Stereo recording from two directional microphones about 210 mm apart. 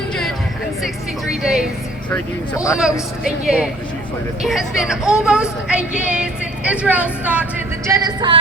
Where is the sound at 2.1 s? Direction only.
15° left (ahead or behind).